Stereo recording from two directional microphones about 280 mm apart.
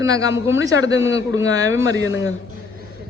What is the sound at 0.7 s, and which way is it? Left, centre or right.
Speech, left.